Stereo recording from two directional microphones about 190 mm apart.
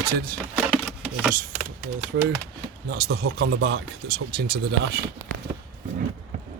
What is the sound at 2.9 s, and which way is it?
Speech, 55° right (ahead or behind).